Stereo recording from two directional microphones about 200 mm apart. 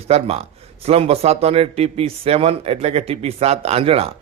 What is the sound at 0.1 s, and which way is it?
Speech, 30° right (ahead or behind).